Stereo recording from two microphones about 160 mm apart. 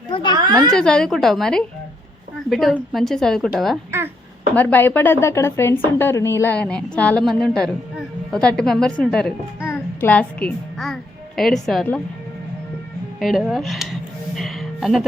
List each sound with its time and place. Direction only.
0.1 s a woman's voice: 30° left (ahead or behind)
0.7 s a woman's voice: 5° left (ahead or behind)
4.5 s a woman's voice: 10° left (ahead or behind)
13.1 s music: centre (ahead or behind)